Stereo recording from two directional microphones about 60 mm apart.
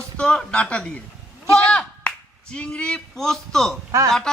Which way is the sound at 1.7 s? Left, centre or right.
Centre.